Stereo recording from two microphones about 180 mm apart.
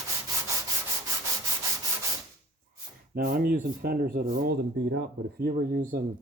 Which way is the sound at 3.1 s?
55° right (ahead or behind).